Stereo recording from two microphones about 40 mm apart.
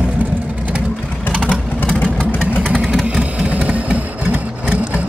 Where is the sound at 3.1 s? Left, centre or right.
Right.